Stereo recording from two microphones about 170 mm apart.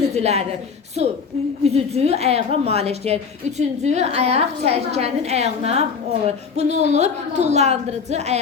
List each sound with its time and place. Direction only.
0.2 s a woman's voice: 40° right (ahead or behind)